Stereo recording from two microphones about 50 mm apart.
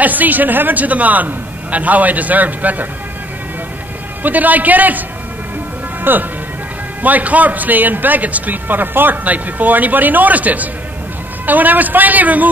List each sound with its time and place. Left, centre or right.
0.0 s a man's voice: right
4.2 s a man's voice: right
6.1 s a man's voice: right